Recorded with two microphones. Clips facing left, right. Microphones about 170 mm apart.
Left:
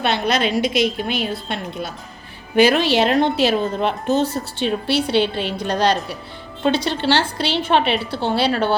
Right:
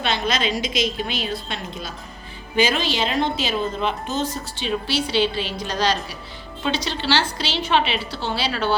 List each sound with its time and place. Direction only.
0.0 s speech: 60° left (ahead or behind)